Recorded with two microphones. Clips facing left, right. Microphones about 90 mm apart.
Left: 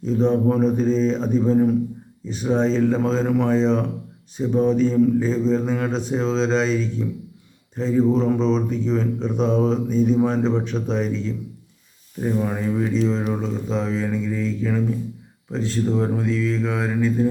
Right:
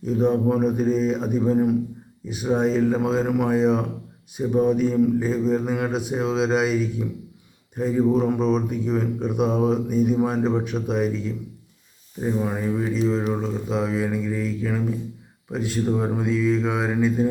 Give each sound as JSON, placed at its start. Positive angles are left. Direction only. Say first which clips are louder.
{"t": 0.0, "sound": "speech", "louder": "left 1 dB", "side_deg": -10}